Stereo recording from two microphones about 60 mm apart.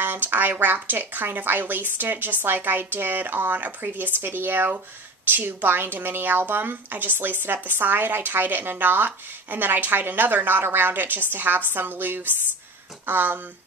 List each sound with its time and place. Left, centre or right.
0.0 s speech: right